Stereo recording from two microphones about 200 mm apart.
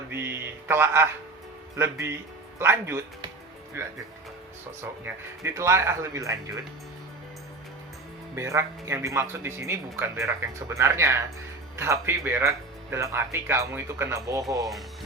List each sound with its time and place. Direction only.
0.1 s a sound: 10° right (ahead or behind)
1.7 s speech: 15° right (ahead or behind)
5.0 s speech: 15° right (ahead or behind)
8.4 s speech: 15° right (ahead or behind)
14.6 s speech: centre (ahead or behind)